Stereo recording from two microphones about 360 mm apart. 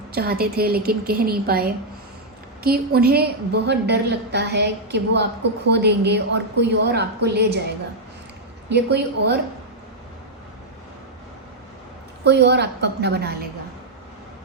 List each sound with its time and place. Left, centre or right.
0.1 s a woman's voice: right
2.6 s a woman's voice: right
8.7 s a woman's voice: right
12.2 s a woman's voice: right